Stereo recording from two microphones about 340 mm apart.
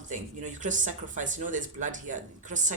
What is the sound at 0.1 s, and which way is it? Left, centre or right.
Speech, right.